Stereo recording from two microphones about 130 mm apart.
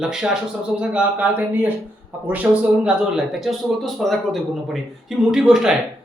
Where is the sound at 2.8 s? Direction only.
5° right (ahead or behind).